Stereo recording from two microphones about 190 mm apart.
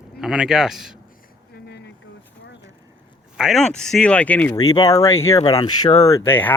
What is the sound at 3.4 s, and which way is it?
Speech, centre (ahead or behind).